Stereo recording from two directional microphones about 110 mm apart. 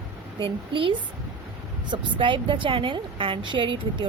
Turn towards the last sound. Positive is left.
turn(degrees=-50)  # may be behind; listen again after turning